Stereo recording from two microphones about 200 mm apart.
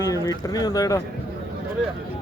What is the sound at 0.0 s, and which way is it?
Speech, 15° left (ahead or behind).